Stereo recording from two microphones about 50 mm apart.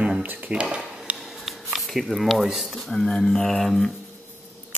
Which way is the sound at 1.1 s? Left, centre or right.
Centre.